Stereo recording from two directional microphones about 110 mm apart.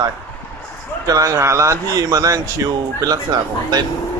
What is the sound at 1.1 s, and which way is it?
A man's voice, 30° right (ahead or behind).